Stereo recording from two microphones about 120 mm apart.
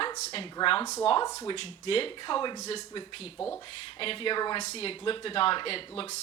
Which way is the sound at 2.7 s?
50° left (ahead or behind).